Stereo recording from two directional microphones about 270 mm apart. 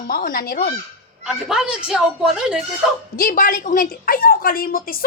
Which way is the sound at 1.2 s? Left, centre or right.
Centre.